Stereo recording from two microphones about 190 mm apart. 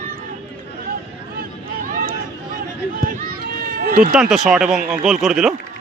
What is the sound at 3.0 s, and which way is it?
Run, 50° right (ahead or behind).